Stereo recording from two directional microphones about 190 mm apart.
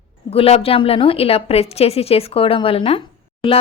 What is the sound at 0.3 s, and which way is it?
A woman's voice, 30° left (ahead or behind).